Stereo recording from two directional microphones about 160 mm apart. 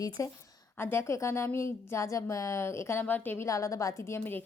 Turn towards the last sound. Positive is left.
turn(degrees=15)  # may be behind; listen again after turning